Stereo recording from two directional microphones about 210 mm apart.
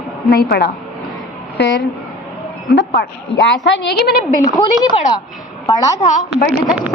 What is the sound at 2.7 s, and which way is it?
A woman's voice, 50° left (ahead or behind).